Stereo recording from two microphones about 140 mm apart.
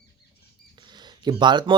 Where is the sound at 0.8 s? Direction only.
30° right (ahead or behind).